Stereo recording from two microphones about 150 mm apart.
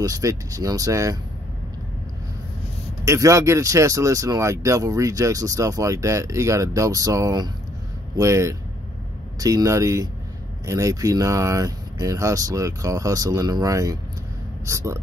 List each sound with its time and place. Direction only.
0.0 s speech: 20° right (ahead or behind)
3.1 s speech: 20° right (ahead or behind)